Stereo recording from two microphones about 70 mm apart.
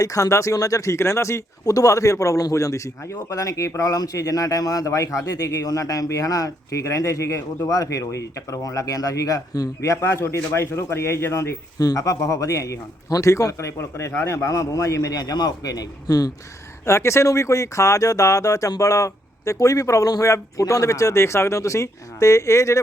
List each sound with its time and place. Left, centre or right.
0.0 s speech: left
11.8 s a man's voice: left
16.8 s speech: left